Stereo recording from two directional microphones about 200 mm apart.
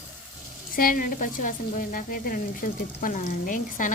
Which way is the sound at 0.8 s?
45° left (ahead or behind).